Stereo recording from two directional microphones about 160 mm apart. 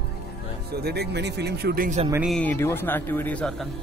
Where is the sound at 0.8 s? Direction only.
90° right.